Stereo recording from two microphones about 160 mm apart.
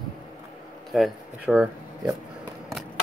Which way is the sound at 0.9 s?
Centre (ahead or behind).